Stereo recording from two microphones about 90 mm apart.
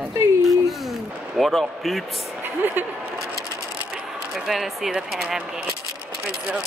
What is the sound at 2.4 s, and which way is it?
Speech, 20° right (ahead or behind).